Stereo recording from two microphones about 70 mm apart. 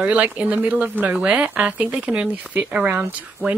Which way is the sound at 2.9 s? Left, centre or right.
Right.